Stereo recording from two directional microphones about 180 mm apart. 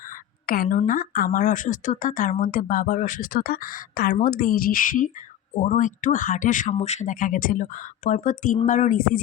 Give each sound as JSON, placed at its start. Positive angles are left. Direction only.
{"t": 0.4, "sound": "a woman's voice", "side_deg": 55}